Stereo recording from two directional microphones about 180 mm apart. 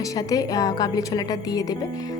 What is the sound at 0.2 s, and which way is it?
A woman's voice, 20° left (ahead or behind).